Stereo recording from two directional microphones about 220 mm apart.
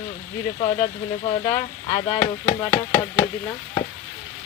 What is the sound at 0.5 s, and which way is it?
Speech, 25° left (ahead or behind).